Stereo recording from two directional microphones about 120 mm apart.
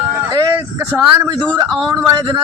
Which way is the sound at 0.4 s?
35° right (ahead or behind).